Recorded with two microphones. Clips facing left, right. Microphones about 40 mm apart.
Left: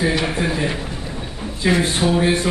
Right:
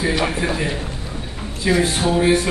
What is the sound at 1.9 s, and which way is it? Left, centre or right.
Speech, centre.